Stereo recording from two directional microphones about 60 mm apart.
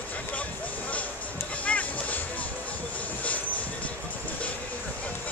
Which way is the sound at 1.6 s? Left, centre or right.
Left.